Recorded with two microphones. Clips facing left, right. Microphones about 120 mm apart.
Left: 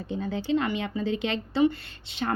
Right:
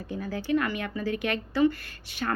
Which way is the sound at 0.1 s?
25° left (ahead or behind).